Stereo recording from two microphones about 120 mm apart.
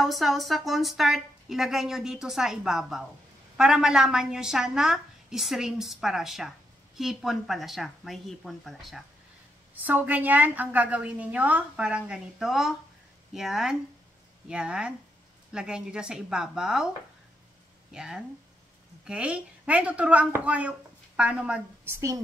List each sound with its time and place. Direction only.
0.0 s a woman's voice: centre (ahead or behind)
9.8 s a woman's voice: 15° right (ahead or behind)
17.9 s a woman's voice: 5° right (ahead or behind)
21.8 s speech: 25° right (ahead or behind)